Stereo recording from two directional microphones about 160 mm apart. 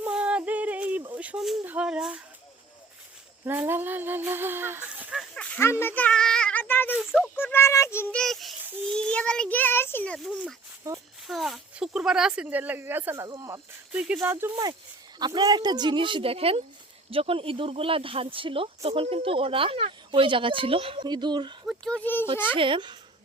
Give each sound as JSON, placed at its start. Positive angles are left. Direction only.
{"t": 0.0, "sound": "a sound", "side_deg": -5}
{"t": 3.4, "sound": "humming", "side_deg": -15}
{"t": 5.8, "sound": "a child's voice", "side_deg": 10}
{"t": 10.8, "sound": "speech", "side_deg": -20}
{"t": 11.3, "sound": "humming", "side_deg": 0}
{"t": 13.2, "sound": "speech", "side_deg": -25}
{"t": 13.9, "sound": "humming", "side_deg": -5}
{"t": 14.5, "sound": "speech", "side_deg": -25}
{"t": 21.7, "sound": "a child's voice", "side_deg": 5}
{"t": 22.5, "sound": "speech", "side_deg": -30}